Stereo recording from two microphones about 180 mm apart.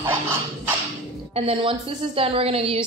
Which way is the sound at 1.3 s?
30° right (ahead or behind).